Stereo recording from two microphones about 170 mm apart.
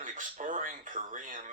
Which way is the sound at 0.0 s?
50° right (ahead or behind).